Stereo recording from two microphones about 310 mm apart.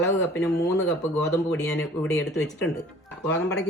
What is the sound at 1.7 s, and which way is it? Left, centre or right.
Speech, centre.